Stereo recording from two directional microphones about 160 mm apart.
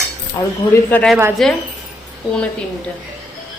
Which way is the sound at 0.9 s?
5° left (ahead or behind).